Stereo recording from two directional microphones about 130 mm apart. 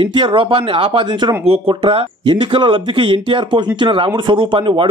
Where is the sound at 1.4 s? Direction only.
45° right (ahead or behind).